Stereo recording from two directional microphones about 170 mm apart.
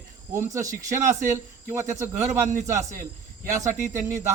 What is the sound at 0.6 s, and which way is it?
Speech, 50° right (ahead or behind).